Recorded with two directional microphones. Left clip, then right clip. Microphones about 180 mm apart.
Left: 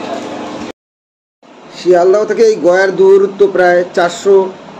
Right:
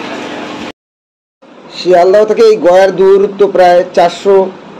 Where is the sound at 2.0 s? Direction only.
30° right (ahead or behind).